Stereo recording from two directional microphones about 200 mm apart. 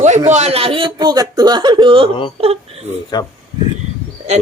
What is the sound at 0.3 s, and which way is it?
Speech, 35° right (ahead or behind).